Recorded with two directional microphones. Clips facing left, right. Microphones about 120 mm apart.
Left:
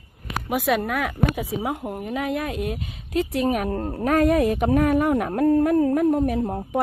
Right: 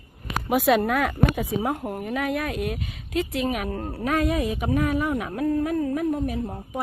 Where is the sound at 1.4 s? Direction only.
10° left (ahead or behind); by 6.2 s 45° left (ahead or behind).